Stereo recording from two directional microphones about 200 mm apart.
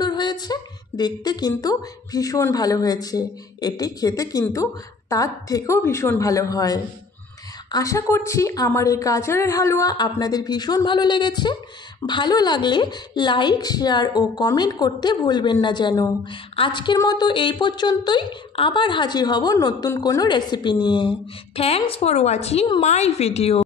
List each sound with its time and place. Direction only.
0.0 s a woman's voice: 20° left (ahead or behind)